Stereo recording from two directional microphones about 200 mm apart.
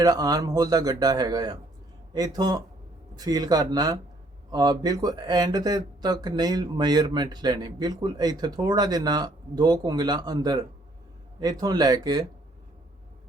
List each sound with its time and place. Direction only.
0.0 s speech: 20° right (ahead or behind)